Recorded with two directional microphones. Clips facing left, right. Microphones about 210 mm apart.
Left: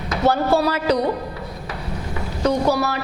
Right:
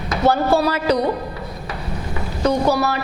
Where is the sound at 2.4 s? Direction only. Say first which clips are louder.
Right 1 dB; 10° right (ahead or behind).